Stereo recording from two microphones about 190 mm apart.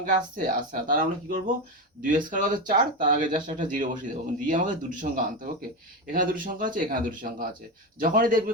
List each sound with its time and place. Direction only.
0.0 s speech: 45° right (ahead or behind)